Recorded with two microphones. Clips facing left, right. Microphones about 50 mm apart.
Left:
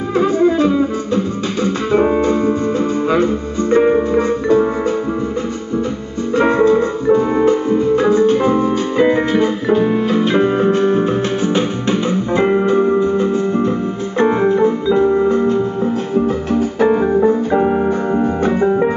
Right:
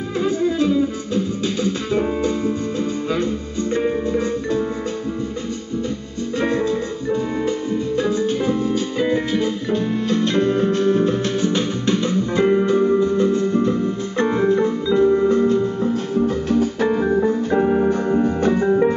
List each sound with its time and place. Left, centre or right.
0.2 s music: centre
3.7 s music: left
6.3 s music: left